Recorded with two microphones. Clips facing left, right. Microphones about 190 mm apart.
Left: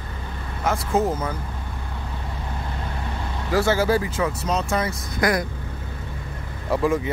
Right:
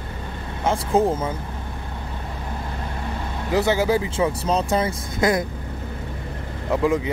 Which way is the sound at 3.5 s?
20° right (ahead or behind).